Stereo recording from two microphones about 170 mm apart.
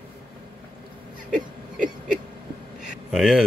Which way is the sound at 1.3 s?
50° right (ahead or behind).